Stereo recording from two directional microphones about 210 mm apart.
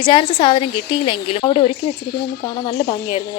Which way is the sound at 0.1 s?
25° left (ahead or behind).